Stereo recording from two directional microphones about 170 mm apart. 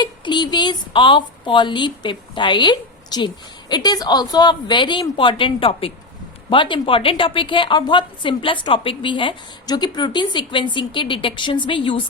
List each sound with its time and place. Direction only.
0.0 s speech: 25° left (ahead or behind)